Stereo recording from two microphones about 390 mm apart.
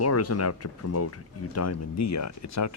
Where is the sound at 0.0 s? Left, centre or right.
Left.